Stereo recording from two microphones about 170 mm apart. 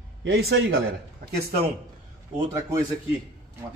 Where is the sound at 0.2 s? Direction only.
85° right.